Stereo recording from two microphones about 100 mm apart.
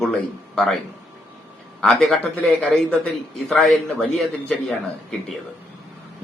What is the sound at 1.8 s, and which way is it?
A man's voice, 5° left (ahead or behind).